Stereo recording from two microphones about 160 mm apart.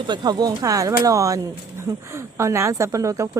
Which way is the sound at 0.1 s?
25° right (ahead or behind).